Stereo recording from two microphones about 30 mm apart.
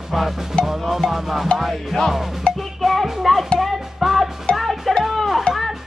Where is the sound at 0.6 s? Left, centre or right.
Centre.